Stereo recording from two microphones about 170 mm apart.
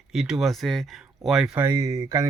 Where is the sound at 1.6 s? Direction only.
15° right (ahead or behind).